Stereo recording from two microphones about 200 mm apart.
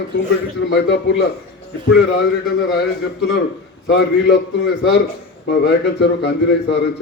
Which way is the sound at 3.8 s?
60° left (ahead or behind).